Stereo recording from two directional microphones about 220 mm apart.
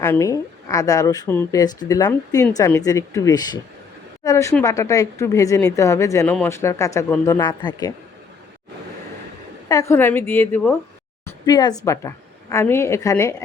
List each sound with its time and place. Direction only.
0.0 s a woman's voice: 10° left (ahead or behind)
9.6 s a woman's voice: 15° left (ahead or behind)
11.3 s a woman's voice: 15° left (ahead or behind)